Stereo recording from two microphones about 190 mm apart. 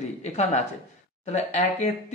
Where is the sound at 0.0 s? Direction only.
35° left (ahead or behind).